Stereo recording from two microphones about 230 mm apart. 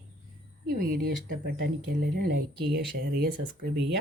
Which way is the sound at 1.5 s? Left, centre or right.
Right.